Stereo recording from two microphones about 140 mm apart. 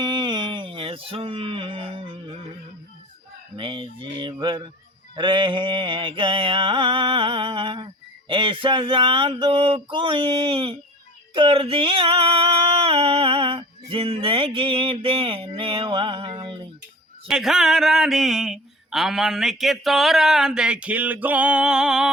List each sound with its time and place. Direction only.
0.0 s music: 30° right (ahead or behind)
3.5 s mantra: 35° right (ahead or behind)
11.3 s a sound: 40° right (ahead or behind)
17.2 s speech: 5° right (ahead or behind)